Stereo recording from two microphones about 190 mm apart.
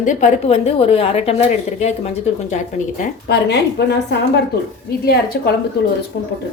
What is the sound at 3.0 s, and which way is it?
Speech, 60° left (ahead or behind).